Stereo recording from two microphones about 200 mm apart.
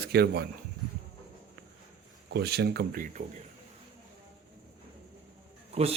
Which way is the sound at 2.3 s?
55° right (ahead or behind).